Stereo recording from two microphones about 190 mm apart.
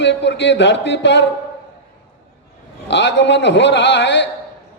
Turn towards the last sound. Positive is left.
turn(degrees=65)  # may be behind; listen again after turning